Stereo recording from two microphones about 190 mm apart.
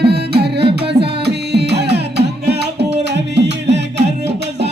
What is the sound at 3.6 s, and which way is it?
Music, 65° right (ahead or behind).